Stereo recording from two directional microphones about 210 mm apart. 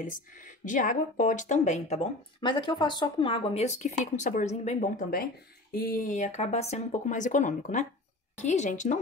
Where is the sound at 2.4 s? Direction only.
20° left (ahead or behind).